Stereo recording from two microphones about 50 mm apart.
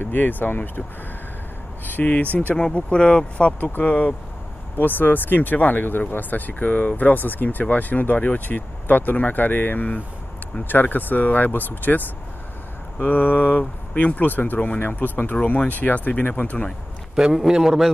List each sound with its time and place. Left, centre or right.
0.0 s speech: left
1.9 s speech: left
2.7 s speech: centre
4.7 s speech: left
13.0 s speech: left
14.8 s speech: left
15.4 s speech: left
17.1 s a man's voice: centre